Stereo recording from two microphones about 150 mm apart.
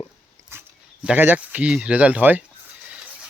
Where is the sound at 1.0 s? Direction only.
10° right (ahead or behind).